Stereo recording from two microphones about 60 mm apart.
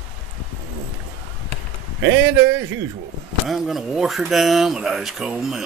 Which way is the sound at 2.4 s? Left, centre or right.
Right.